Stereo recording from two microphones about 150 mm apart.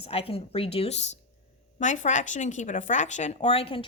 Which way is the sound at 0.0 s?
40° left (ahead or behind).